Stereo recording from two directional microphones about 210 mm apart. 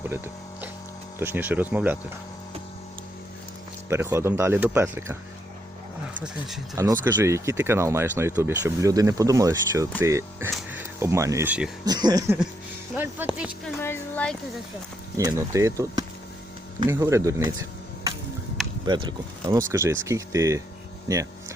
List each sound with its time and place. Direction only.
1.2 s speech: 10° right (ahead or behind)
3.8 s speech: 10° right (ahead or behind)
7.0 s speech: 10° right (ahead or behind)
11.9 s speech: 20° right (ahead or behind)
12.9 s speech: 5° right (ahead or behind)
13.8 s speech: 10° left (ahead or behind)
15.2 s speech: 15° right (ahead or behind)
18.9 s speech: 20° right (ahead or behind)